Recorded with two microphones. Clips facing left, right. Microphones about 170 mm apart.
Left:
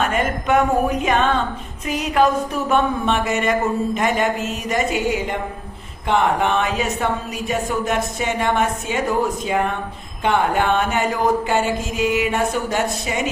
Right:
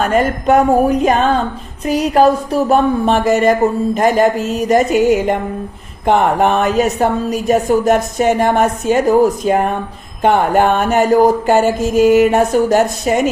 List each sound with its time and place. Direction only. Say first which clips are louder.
0.0 s speech: right 7 dB; 40° right (ahead or behind)